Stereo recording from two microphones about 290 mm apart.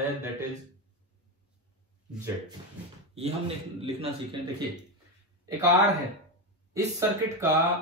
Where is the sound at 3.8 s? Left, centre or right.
Centre.